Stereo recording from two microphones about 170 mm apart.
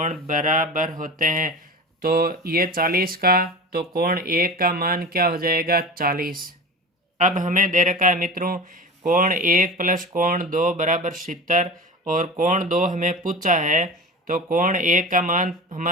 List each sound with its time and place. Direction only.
0.0 s speech: 50° right (ahead or behind)
7.2 s speech: 50° right (ahead or behind)